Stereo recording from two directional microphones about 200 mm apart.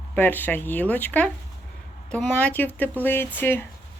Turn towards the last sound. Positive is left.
turn(degrees=10)  # may be behind; listen again after turning